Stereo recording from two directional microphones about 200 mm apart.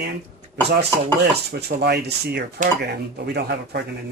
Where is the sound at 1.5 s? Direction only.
55° right (ahead or behind).